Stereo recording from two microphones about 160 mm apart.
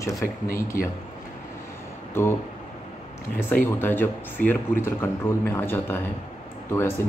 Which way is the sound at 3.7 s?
15° left (ahead or behind).